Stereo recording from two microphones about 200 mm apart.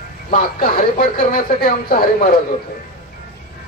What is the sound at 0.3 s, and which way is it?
Speech, 45° left (ahead or behind).